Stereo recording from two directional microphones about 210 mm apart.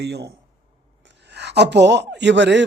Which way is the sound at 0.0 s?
50° right (ahead or behind).